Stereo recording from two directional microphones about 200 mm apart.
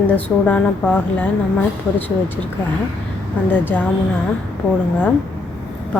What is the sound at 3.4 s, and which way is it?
Speech, 10° left (ahead or behind).